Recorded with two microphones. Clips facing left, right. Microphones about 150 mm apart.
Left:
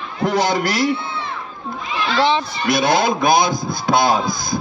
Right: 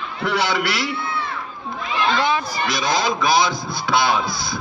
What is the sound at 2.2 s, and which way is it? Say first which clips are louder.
Speech: left 4 dB; 25° left (ahead or behind).